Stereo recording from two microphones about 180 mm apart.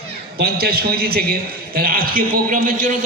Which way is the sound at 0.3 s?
60° right (ahead or behind).